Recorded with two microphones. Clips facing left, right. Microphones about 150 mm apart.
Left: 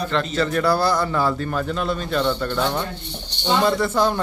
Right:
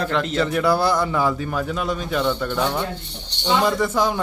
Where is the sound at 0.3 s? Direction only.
15° right (ahead or behind).